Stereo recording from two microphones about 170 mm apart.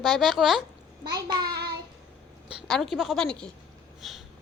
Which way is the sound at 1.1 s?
25° right (ahead or behind).